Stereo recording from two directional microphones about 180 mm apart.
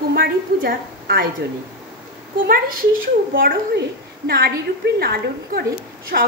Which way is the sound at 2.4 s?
55° right (ahead or behind).